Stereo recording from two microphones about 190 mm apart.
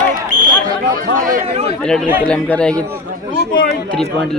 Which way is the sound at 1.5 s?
30° right (ahead or behind).